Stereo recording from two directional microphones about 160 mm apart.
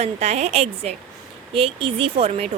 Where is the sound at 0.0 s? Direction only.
45° right (ahead or behind).